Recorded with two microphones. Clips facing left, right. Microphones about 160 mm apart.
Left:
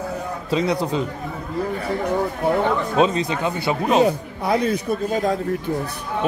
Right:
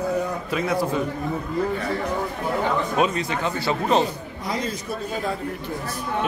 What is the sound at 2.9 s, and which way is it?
Speech, 25° left (ahead or behind).